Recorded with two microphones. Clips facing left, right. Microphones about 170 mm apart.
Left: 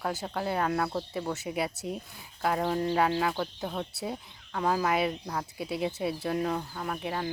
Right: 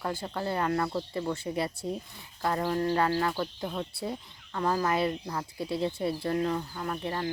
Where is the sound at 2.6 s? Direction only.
15° left (ahead or behind).